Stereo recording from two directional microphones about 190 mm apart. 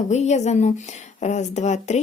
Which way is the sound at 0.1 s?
35° left (ahead or behind).